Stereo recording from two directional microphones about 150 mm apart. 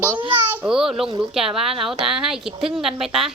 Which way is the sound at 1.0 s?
30° right (ahead or behind).